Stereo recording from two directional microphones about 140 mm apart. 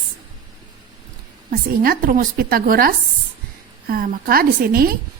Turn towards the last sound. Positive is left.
turn(degrees=-90)